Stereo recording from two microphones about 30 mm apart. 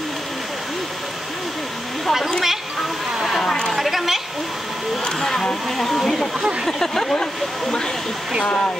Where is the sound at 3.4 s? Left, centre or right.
Left.